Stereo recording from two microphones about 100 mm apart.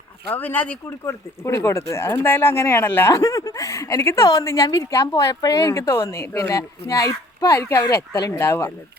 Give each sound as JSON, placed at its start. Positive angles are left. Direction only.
{"t": 0.3, "sound": "speech", "side_deg": 15}
{"t": 1.0, "sound": "speech", "side_deg": 30}
{"t": 6.5, "sound": "speech", "side_deg": 35}
{"t": 8.1, "sound": "speech", "side_deg": 40}
{"t": 8.4, "sound": "speech", "side_deg": 25}